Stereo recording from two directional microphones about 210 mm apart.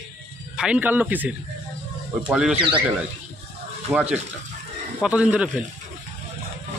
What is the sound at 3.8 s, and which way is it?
Speech, 5° right (ahead or behind).